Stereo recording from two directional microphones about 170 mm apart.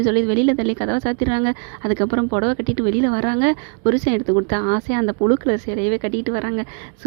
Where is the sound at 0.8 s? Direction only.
35° right (ahead or behind).